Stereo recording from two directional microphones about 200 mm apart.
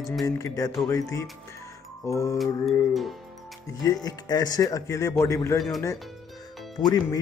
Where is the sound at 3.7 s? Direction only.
15° left (ahead or behind).